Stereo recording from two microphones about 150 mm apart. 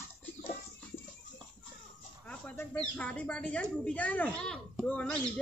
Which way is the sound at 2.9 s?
10° left (ahead or behind).